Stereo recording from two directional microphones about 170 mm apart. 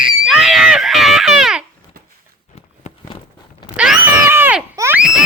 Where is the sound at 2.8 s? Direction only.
40° left (ahead or behind).